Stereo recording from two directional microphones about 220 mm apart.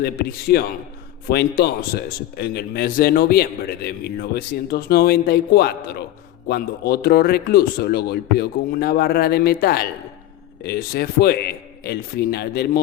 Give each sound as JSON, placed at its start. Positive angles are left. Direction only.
{"t": 0.0, "sound": "a man's voice", "side_deg": 45}